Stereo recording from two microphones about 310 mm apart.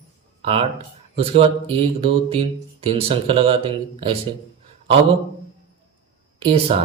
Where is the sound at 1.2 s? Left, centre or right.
Centre.